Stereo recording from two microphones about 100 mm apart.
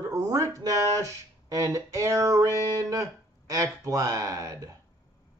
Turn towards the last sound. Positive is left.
turn(degrees=-35)  # may be behind; listen again after turning